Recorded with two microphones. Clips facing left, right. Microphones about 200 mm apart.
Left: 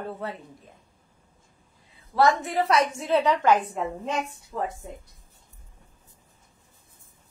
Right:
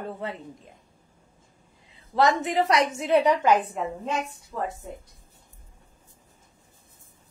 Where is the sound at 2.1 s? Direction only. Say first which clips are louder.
Even; 20° right (ahead or behind).